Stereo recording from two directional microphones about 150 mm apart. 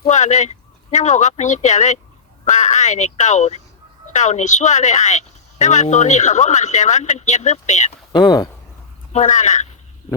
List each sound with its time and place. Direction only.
0.1 s a woman's voice: 50° left (ahead or behind)
8.1 s speech: 30° left (ahead or behind)
9.1 s a woman's voice: 50° left (ahead or behind)